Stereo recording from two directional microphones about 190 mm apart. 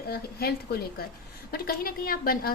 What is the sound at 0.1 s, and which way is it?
A woman's voice, 55° left (ahead or behind).